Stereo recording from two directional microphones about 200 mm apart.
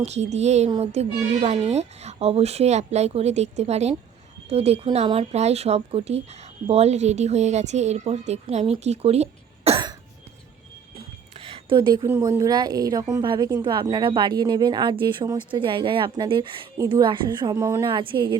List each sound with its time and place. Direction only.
0.0 s speech: 35° right (ahead or behind)
10.9 s a sound: 25° right (ahead or behind)
12.0 s a woman's voice: 10° right (ahead or behind)